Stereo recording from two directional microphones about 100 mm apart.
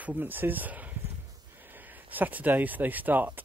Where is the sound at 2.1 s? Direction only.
15° right (ahead or behind).